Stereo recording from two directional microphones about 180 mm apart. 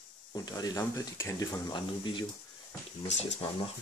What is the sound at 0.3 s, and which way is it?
Speech, 20° left (ahead or behind).